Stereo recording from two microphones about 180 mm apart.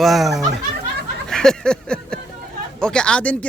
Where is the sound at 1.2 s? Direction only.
5° left (ahead or behind).